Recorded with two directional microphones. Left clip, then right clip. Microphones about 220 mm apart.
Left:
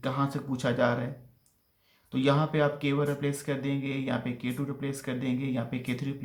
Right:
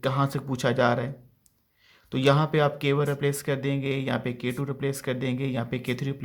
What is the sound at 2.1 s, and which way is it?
Speech, 40° right (ahead or behind).